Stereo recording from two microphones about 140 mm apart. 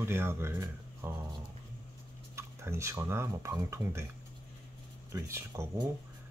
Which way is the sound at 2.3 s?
20° right (ahead or behind).